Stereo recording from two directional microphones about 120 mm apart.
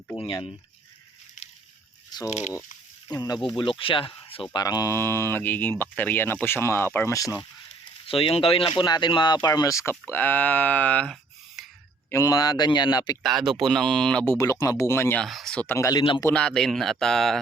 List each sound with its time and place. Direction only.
3.1 s speech: 35° left (ahead or behind); by 4.4 s 50° left (ahead or behind)
4.5 s speech: 30° left (ahead or behind)
8.0 s speech: 50° left (ahead or behind)
9.4 s speech: 30° left (ahead or behind)
10.1 s speech: 15° left (ahead or behind)
11.1 s a sound: centre (ahead or behind)
12.1 s speech: 30° left (ahead or behind)
13.2 s speech: 5° right (ahead or behind)
14.3 s speech: 30° left (ahead or behind)
15.2 s speech: centre (ahead or behind)
15.6 s speech: 15° left (ahead or behind)
15.9 s speech: 40° left (ahead or behind)
16.3 s speech: 5° left (ahead or behind)